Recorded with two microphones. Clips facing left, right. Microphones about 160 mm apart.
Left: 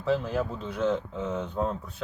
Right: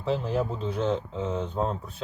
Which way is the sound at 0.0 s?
25° right (ahead or behind).